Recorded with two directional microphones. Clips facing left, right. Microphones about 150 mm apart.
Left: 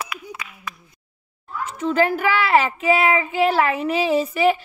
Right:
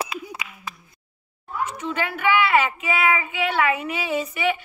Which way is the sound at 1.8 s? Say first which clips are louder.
Left 7 dB; 35° left (ahead or behind).